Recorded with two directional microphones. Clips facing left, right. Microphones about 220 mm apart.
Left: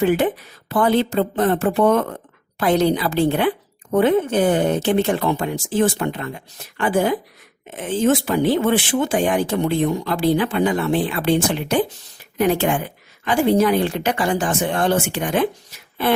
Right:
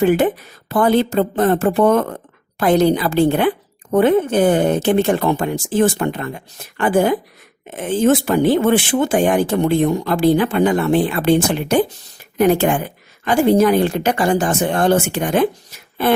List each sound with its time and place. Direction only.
0.0 s speech: 50° right (ahead or behind)